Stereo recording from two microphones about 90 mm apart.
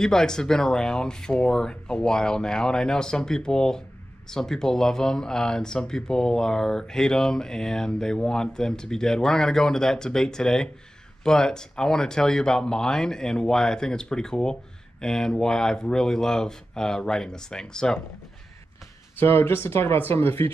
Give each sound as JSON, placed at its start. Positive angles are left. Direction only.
{"t": 0.0, "sound": "speech", "side_deg": 5}
{"t": 19.1, "sound": "speech", "side_deg": 25}